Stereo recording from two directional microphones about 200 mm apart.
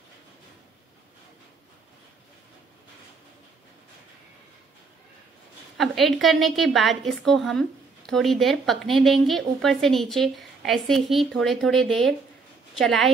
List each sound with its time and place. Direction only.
5.8 s a woman's voice: centre (ahead or behind)